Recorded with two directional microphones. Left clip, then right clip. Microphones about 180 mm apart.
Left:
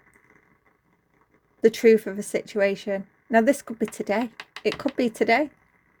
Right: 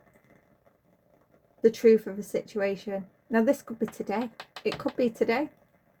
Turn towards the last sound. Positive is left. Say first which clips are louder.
# left 5 dB
turn(degrees=55)  # may be behind; listen again after turning